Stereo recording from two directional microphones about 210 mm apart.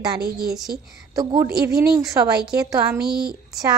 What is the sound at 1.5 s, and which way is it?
Speech, 50° right (ahead or behind).